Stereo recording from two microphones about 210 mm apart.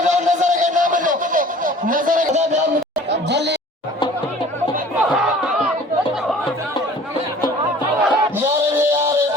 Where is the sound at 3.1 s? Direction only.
55° right (ahead or behind).